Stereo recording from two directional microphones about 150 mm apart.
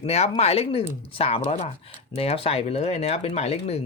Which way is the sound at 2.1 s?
40° left (ahead or behind).